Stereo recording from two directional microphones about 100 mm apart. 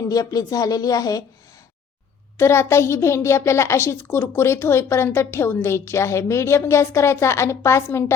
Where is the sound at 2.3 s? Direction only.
25° left (ahead or behind).